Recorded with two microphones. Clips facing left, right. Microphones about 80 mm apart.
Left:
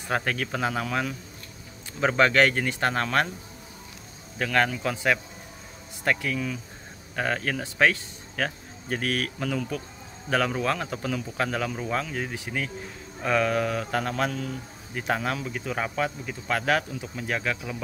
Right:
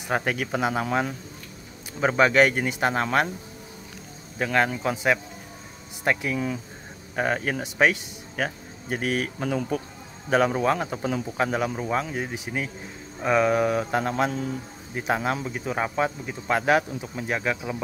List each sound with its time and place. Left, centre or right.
0.0 s speech: centre
0.8 s speech: right
2.0 s speech: centre
4.4 s speech: centre